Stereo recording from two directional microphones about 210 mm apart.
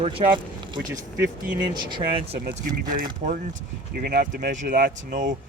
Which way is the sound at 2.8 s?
40° right (ahead or behind).